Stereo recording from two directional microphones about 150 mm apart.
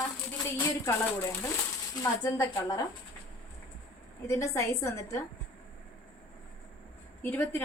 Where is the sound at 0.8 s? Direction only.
15° left (ahead or behind).